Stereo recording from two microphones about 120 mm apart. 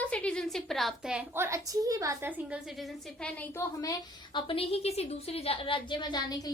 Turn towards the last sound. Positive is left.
turn(degrees=35)  # may be behind; listen again after turning